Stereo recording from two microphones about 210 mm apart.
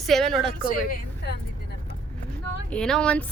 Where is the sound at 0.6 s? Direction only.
45° left (ahead or behind).